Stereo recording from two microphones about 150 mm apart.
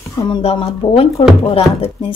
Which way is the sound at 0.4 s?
40° left (ahead or behind).